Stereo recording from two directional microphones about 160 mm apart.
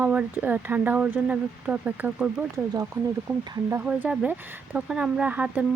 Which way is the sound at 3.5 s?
15° right (ahead or behind).